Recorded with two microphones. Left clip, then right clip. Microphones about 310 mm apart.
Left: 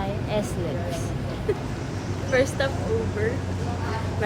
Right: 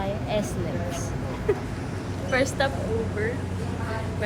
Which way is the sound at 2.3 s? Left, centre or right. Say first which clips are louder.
Left 1 dB; centre.